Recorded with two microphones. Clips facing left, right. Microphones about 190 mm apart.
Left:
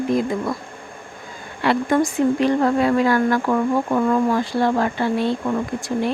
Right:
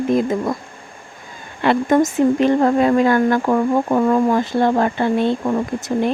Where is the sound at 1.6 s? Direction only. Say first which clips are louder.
Right 3 dB; 20° right (ahead or behind).